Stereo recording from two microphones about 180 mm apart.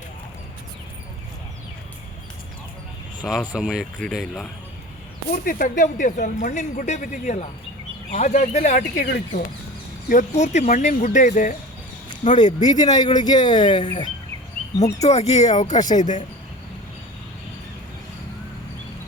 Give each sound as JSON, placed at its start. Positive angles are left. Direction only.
{"t": 3.2, "sound": "speech", "side_deg": -5}
{"t": 5.5, "sound": "speech", "side_deg": 50}
{"t": 12.6, "sound": "speech", "side_deg": 20}
{"t": 15.0, "sound": "speech", "side_deg": 35}